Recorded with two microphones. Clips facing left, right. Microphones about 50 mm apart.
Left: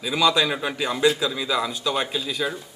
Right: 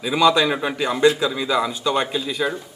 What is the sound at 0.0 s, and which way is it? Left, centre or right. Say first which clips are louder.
A man's voice: right 4 dB; centre.